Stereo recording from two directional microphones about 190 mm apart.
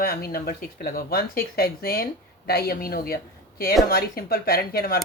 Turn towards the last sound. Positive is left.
turn(degrees=55)  # may be behind; listen again after turning